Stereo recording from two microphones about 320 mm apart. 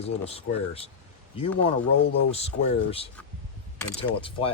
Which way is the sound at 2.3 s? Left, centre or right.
Centre.